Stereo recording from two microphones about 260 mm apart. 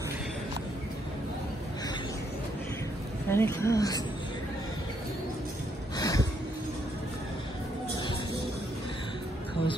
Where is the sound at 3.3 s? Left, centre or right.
Centre.